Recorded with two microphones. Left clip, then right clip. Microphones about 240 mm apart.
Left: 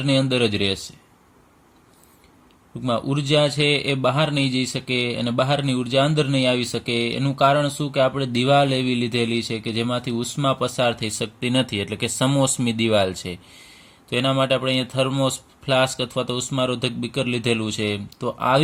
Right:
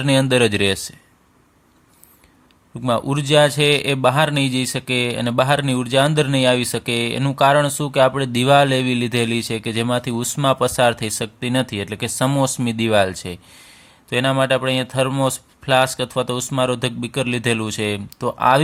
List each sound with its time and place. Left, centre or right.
0.0 s speech: right
2.8 s speech: right